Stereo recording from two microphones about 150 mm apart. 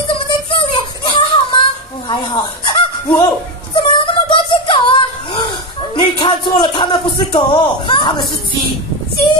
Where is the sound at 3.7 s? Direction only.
35° left (ahead or behind).